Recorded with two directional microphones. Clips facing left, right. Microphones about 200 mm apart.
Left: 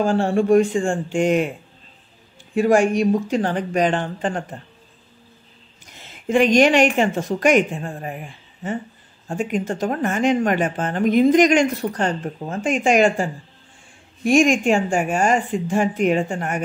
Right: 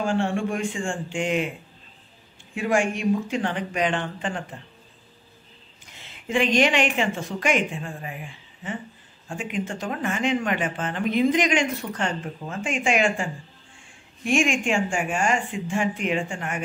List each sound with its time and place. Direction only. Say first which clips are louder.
0.0 s speech: left 6 dB; 35° left (ahead or behind)
2.5 s speech: left 7 dB; 40° left (ahead or behind)
5.9 s a woman's voice: left 7 dB; 45° left (ahead or behind)